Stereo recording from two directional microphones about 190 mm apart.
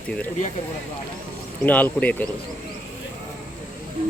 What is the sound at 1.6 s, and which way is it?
Speech, 10° left (ahead or behind).